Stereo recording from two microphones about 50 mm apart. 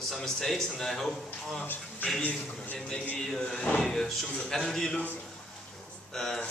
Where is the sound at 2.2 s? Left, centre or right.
Left.